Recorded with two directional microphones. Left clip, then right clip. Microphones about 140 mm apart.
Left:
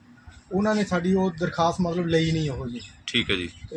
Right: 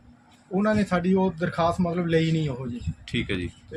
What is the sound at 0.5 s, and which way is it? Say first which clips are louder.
Speech: even; 40° right (ahead or behind).